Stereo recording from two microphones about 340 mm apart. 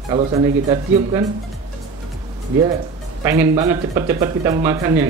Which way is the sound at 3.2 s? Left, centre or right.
Centre.